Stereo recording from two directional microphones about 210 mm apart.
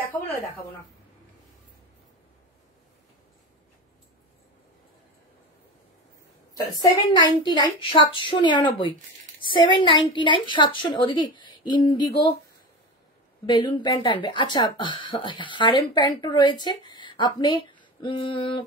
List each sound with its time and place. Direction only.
6.5 s speech: 15° left (ahead or behind)
13.5 s speech: 20° left (ahead or behind)